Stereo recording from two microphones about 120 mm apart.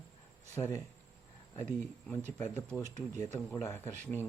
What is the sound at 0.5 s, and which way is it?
Speech, 25° left (ahead or behind).